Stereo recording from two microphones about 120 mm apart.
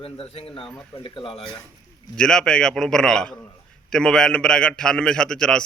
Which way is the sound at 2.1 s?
5° left (ahead or behind).